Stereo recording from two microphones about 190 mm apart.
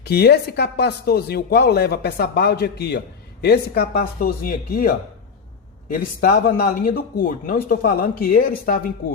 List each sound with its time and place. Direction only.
0.0 s speech: 55° left (ahead or behind)